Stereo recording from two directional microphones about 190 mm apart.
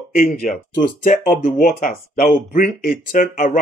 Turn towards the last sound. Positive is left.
turn(degrees=45)  # may be behind; listen again after turning